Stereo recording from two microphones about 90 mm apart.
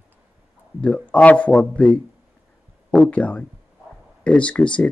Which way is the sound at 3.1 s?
15° left (ahead or behind).